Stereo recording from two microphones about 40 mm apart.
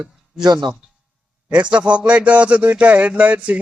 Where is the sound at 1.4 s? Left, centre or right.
Right.